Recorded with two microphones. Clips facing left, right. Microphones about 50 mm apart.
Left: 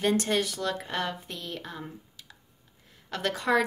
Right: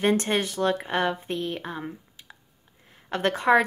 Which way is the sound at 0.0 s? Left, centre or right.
Right.